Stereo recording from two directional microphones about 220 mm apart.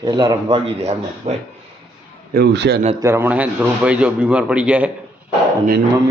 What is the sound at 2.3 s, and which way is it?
Speech, 50° right (ahead or behind).